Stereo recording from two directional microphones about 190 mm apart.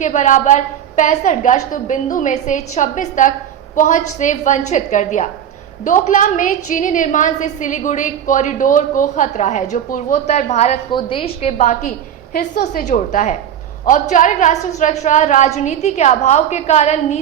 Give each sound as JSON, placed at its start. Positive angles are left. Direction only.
{"t": 0.0, "sound": "a woman's voice", "side_deg": 40}